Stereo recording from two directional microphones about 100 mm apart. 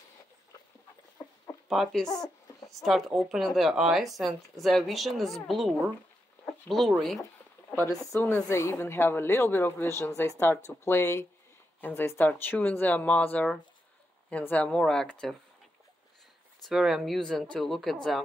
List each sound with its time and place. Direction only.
1.7 s speech: centre (ahead or behind)
2.0 s speech: 40° left (ahead or behind)
2.7 s speech: centre (ahead or behind)
6.4 s a sound: 5° left (ahead or behind)
7.8 s speech: 30° left (ahead or behind)
8.2 s a woman's voice: 20° left (ahead or behind)
16.6 s speech: centre (ahead or behind)